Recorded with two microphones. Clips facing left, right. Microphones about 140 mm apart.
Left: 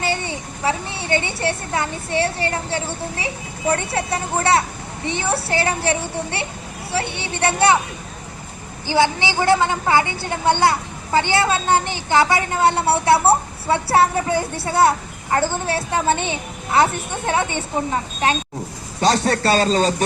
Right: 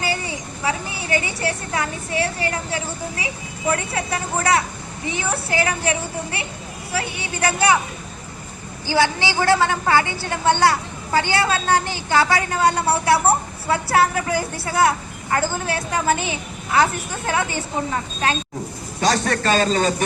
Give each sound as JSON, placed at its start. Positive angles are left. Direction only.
{"t": 0.0, "sound": "a woman's voice", "side_deg": 25}
{"t": 8.9, "sound": "a woman's voice", "side_deg": 20}
{"t": 19.0, "sound": "a child's voice", "side_deg": 30}